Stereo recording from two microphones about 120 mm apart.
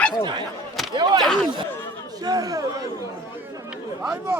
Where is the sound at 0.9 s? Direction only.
40° right (ahead or behind).